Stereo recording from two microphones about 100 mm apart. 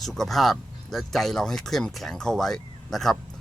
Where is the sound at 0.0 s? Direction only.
Centre (ahead or behind).